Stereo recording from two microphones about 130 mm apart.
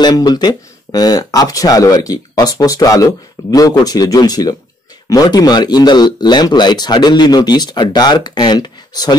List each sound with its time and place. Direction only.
0.0 s speech: 30° left (ahead or behind)